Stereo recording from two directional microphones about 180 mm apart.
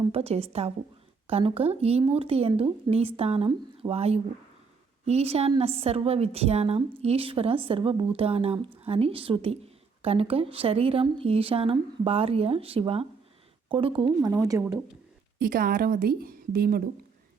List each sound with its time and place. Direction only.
0.0 s speech: 35° right (ahead or behind)
14.0 s speech: 20° right (ahead or behind)
15.4 s a woman's voice: 55° right (ahead or behind)